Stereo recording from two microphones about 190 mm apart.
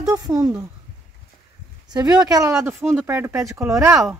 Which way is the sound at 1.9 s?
20° right (ahead or behind).